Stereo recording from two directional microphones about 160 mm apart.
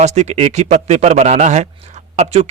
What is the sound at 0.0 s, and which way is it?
A man's voice, 45° right (ahead or behind).